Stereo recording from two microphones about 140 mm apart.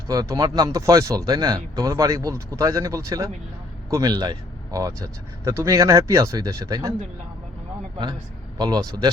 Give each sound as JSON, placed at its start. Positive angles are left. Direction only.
{"t": 0.1, "sound": "speech", "side_deg": -25}
{"t": 8.5, "sound": "speech", "side_deg": -30}